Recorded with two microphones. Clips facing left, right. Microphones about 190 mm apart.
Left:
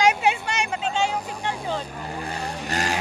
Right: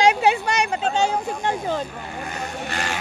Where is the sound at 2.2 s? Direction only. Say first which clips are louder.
Right 2 dB; 35° left (ahead or behind).